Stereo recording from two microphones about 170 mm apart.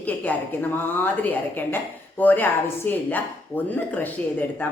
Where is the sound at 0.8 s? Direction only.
10° left (ahead or behind).